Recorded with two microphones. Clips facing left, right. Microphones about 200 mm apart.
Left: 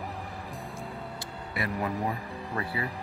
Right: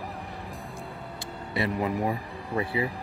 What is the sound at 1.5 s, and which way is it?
Speech, 25° right (ahead or behind).